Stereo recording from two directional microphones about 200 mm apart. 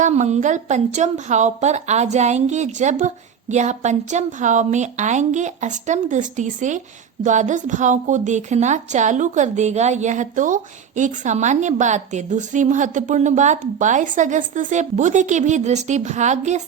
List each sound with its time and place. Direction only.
0.0 s a woman's voice: 35° right (ahead or behind)